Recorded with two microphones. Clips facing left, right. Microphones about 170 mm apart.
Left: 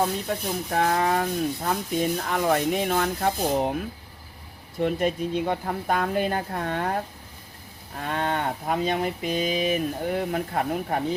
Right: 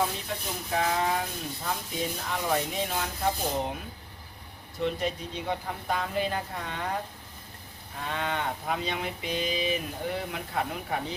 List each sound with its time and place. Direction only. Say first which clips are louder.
0.7 s speech: left 4 dB; 55° left (ahead or behind)
4.8 s livestock: left 6 dB; 55° left (ahead or behind)